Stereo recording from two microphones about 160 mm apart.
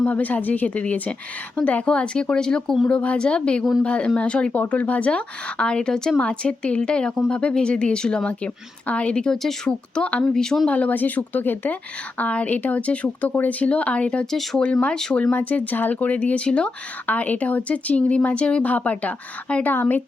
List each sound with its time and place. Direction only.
0.0 s speech: 10° left (ahead or behind)